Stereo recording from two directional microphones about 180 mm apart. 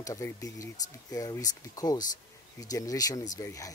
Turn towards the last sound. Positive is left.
turn(degrees=20)  # may be behind; listen again after turning